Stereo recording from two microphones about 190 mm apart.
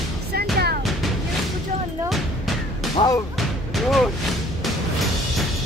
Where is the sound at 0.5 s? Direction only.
55° right (ahead or behind).